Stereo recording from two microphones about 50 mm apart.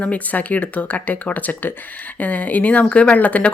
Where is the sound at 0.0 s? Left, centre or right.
Left.